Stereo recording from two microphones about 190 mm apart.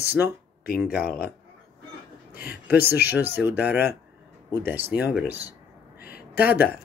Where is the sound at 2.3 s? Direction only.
55° left (ahead or behind).